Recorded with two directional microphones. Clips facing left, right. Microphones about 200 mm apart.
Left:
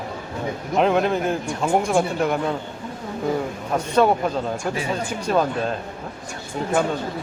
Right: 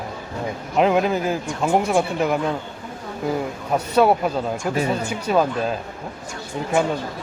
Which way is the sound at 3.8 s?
10° right (ahead or behind).